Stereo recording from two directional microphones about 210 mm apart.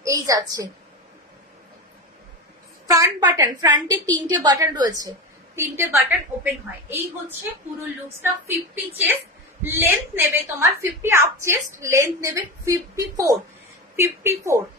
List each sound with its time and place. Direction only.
0.0 s a sound: 15° right (ahead or behind)
2.9 s a woman's voice: 15° right (ahead or behind)
9.0 s a woman's voice: 10° right (ahead or behind)